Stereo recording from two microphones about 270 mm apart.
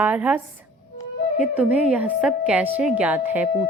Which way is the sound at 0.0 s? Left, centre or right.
Centre.